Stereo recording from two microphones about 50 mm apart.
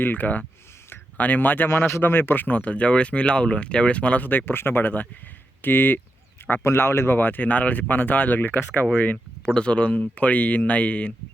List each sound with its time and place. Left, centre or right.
0.0 s speech: left
1.7 s speech: left
2.0 s speech: left
4.3 s speech: left
6.6 s speech: left
7.2 s speech: left
9.6 s speech: left